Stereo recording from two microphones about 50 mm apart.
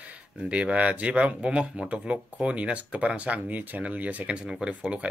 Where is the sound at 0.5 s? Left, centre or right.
Right.